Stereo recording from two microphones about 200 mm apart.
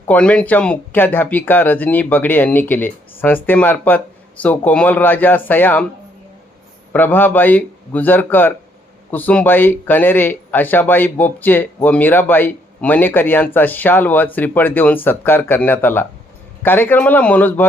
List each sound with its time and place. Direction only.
0.1 s speech: 5° left (ahead or behind)
6.9 s speech: 10° left (ahead or behind)